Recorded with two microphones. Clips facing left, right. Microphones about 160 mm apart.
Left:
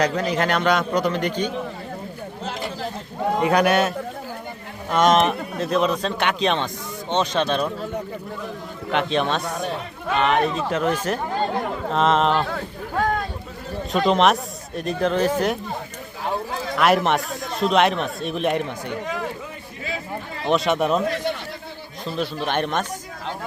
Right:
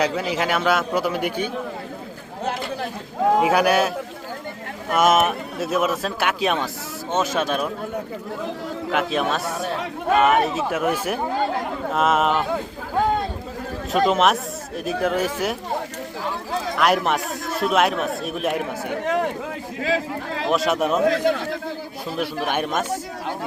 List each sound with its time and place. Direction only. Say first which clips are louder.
0.0 s a man's voice: left 1 dB; 5° right (ahead or behind)
3.3 s a man's voice: left 1 dB; 5° right (ahead or behind)
8.9 s a man's voice: left 1 dB; 5° right (ahead or behind)
14.1 s speech: left 1 dB; 5° right (ahead or behind)
16.7 s speech: left 2 dB; centre (ahead or behind)
18.9 s speech: right 5 dB; 60° right (ahead or behind)
19.8 s speech: right 6 dB; 90° right
20.5 s speech: left 1 dB; centre (ahead or behind)
21.0 s speech: right 5 dB; 90° right
22.0 s a man's voice: even; 10° right (ahead or behind)